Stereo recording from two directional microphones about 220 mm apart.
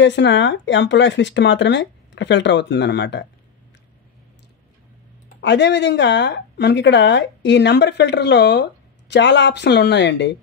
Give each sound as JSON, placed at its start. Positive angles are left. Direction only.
{"t": 0.0, "sound": "speech", "side_deg": 55}
{"t": 5.4, "sound": "speech", "side_deg": 50}